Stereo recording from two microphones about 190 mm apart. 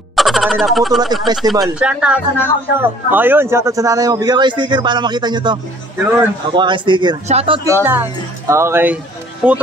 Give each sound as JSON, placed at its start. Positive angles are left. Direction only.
{"t": 0.1, "sound": "a sound", "side_deg": 0}
{"t": 1.5, "sound": "speech", "side_deg": -5}
{"t": 5.9, "sound": "speech", "side_deg": -10}
{"t": 6.5, "sound": "a man's voice", "side_deg": -25}
{"t": 7.6, "sound": "speech", "side_deg": -15}